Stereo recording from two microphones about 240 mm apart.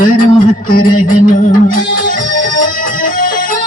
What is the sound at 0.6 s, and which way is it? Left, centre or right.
Music, left.